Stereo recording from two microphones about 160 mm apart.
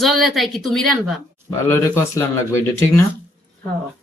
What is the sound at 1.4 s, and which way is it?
Speech, 15° left (ahead or behind).